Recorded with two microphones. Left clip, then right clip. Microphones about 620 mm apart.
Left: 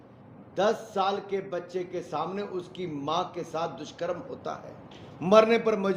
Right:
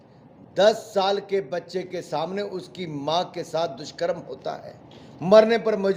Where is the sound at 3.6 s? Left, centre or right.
Right.